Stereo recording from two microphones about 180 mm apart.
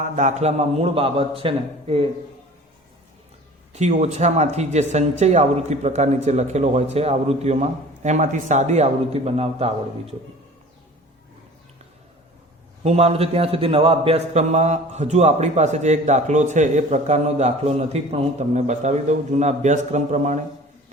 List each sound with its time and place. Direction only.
0.0 s a man's voice: 40° right (ahead or behind)
3.7 s a man's voice: 40° right (ahead or behind)
12.8 s a man's voice: 35° right (ahead or behind)